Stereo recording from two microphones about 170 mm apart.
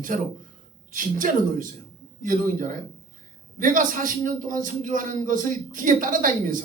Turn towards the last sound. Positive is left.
turn(degrees=-55)  # may be behind; listen again after turning